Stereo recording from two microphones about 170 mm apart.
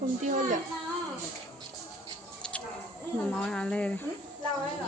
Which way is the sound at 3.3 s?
5° left (ahead or behind).